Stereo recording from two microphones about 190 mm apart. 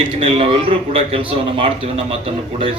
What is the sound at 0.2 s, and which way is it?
A man's voice, 30° right (ahead or behind).